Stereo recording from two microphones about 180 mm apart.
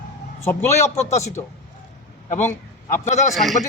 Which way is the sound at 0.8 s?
40° left (ahead or behind).